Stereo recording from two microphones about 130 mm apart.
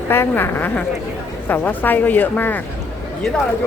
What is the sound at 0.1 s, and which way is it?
Speech, 20° left (ahead or behind).